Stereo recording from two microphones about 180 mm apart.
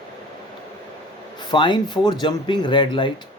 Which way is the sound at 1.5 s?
25° left (ahead or behind).